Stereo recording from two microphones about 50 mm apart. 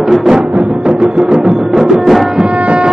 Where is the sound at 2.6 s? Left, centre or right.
Right.